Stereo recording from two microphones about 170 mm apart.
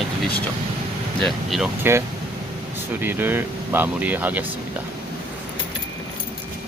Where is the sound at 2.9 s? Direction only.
10° right (ahead or behind).